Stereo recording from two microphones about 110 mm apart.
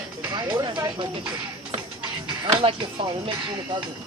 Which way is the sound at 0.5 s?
35° right (ahead or behind).